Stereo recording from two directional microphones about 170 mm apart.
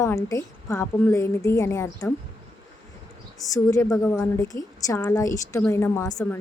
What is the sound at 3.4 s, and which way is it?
A woman's voice, 20° left (ahead or behind).